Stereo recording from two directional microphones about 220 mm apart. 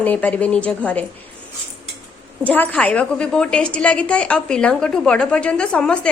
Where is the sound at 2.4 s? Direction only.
5° left (ahead or behind).